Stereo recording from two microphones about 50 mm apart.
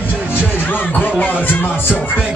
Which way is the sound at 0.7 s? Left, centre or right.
Left.